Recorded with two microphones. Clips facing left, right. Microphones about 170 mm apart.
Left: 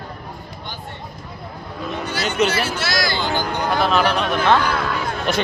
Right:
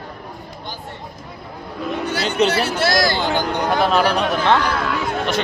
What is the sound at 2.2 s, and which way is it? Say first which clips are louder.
Speech: right 1 dB; 35° right (ahead or behind).